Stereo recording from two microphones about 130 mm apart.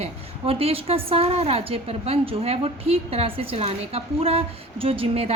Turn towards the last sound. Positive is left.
turn(degrees=-50)  # may be behind; listen again after turning